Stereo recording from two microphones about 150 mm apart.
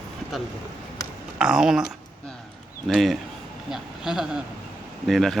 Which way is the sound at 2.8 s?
Centre (ahead or behind).